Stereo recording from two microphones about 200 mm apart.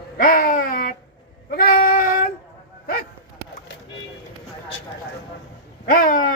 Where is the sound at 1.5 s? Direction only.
50° left (ahead or behind).